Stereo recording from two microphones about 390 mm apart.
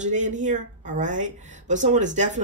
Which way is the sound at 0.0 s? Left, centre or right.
Centre.